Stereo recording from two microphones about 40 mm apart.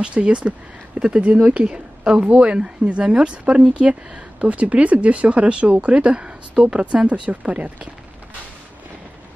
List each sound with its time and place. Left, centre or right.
0.0 s a woman's voice: right